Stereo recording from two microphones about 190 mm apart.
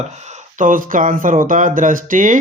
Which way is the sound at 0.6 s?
45° right (ahead or behind).